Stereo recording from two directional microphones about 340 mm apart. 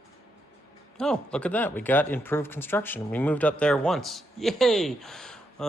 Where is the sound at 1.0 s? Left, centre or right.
Centre.